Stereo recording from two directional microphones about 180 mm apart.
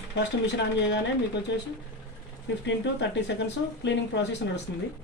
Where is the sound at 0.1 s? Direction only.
75° left (ahead or behind).